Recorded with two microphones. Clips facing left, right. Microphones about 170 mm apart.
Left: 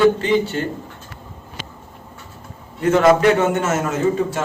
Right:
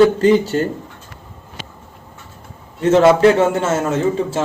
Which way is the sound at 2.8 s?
25° right (ahead or behind).